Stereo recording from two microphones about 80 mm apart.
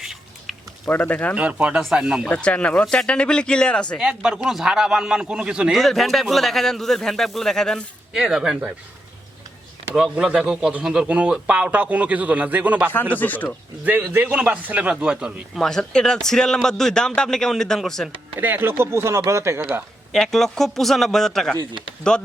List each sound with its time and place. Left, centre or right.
0.0 s a sound: centre
0.9 s speech: left
1.4 s speech: centre
2.3 s speech: centre
3.9 s speech: centre
5.7 s speech: centre
8.1 s speech: centre
9.9 s speech: centre
13.1 s speech: left
13.8 s speech: right
15.5 s speech: centre
18.3 s speech: right
20.1 s speech: centre
21.6 s a man's voice: right